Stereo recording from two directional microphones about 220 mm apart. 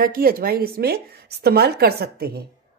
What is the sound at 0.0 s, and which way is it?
Speech, 40° right (ahead or behind).